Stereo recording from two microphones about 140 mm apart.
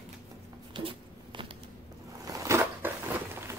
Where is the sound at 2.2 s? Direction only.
20° right (ahead or behind).